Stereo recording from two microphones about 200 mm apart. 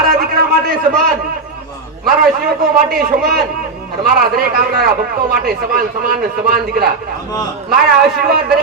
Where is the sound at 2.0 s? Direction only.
45° right (ahead or behind).